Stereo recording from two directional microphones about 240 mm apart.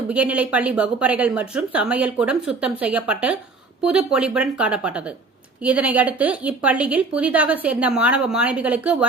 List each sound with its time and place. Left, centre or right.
0.1 s speech: centre